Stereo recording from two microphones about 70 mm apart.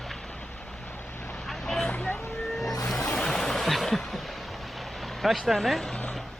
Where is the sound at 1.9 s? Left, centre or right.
Centre.